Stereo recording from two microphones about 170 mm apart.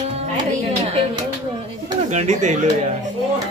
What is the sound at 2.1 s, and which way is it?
Speech, 45° right (ahead or behind).